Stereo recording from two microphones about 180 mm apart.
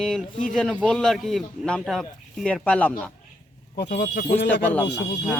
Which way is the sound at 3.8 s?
45° left (ahead or behind).